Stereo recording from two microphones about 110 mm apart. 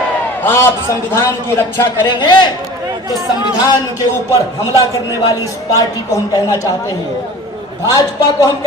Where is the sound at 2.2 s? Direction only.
40° left (ahead or behind).